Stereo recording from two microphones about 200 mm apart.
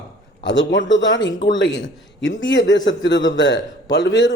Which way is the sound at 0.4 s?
65° left (ahead or behind).